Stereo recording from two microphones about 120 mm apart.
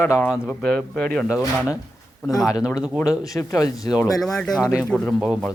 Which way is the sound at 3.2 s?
30° left (ahead or behind).